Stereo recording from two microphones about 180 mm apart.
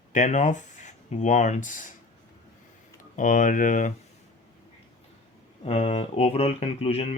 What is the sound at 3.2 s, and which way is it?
Speech, 45° left (ahead or behind).